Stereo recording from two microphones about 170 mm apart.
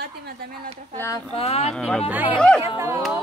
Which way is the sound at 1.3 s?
35° left (ahead or behind).